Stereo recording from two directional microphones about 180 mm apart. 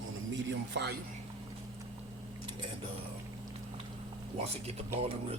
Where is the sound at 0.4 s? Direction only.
75° right (ahead or behind).